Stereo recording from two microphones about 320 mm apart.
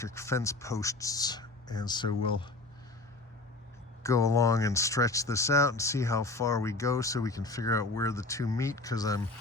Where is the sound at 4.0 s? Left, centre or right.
Centre.